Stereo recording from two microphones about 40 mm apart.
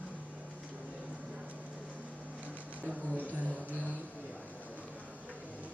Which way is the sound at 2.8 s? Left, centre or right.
Left.